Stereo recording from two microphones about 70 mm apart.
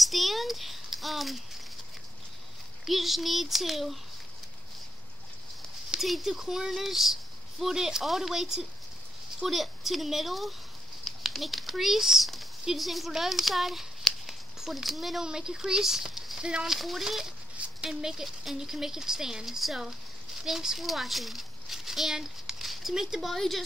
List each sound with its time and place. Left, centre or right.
0.0 s a sound: centre
2.9 s speech: centre
5.9 s a child's voice: centre